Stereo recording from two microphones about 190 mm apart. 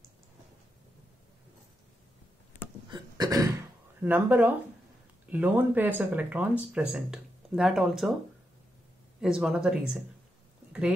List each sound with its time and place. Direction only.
2.9 s a sound: 20° right (ahead or behind)
4.0 s speech: 10° right (ahead or behind)
9.2 s speech: 5° right (ahead or behind)